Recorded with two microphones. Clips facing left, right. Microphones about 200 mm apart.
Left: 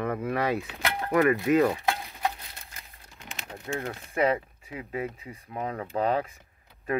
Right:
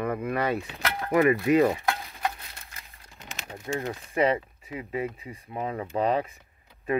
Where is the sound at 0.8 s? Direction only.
15° left (ahead or behind).